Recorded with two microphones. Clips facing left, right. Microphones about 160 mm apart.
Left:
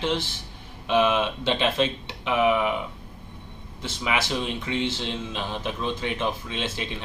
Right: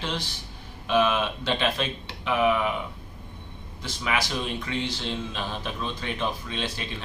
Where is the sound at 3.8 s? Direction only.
25° left (ahead or behind).